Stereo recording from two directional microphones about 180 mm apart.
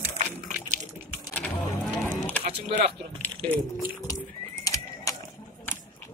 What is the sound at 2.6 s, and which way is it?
Speech, 35° right (ahead or behind).